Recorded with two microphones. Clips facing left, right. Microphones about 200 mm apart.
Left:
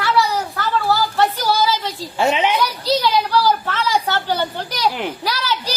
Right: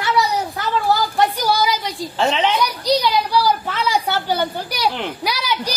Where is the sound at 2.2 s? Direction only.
10° left (ahead or behind).